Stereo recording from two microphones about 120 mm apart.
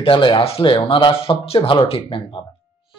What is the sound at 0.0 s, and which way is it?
Speech, 45° left (ahead or behind).